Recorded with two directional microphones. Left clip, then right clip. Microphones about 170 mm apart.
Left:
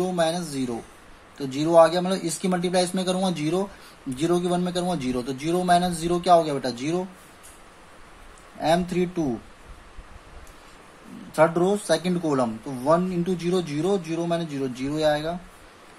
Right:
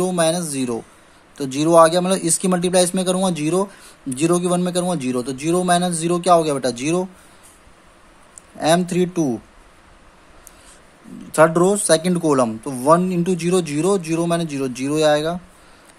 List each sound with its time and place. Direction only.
0.0 s speech: 50° right (ahead or behind)
8.5 s speech: 50° right (ahead or behind)
11.3 s speech: 50° right (ahead or behind)